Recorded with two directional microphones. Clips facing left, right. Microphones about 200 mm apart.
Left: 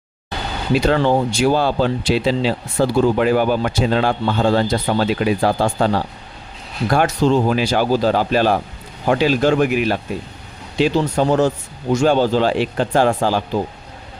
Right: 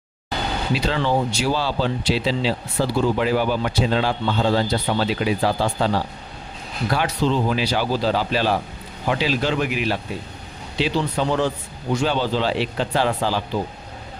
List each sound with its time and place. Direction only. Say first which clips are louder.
0.7 s speech: left 7 dB; 50° left (ahead or behind)